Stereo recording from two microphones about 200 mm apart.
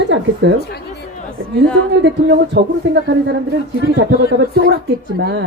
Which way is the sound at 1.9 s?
60° right (ahead or behind).